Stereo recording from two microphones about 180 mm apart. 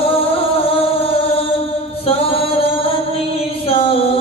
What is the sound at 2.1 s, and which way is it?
Singing, 30° left (ahead or behind).